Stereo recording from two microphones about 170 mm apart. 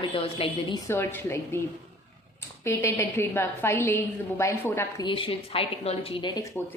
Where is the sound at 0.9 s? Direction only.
15° left (ahead or behind).